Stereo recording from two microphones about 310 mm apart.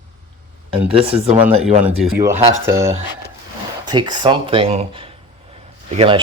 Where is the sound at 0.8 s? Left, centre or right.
Centre.